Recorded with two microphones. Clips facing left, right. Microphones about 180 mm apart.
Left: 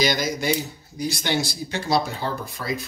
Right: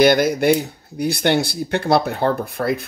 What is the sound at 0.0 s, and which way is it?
Speech, 60° right (ahead or behind).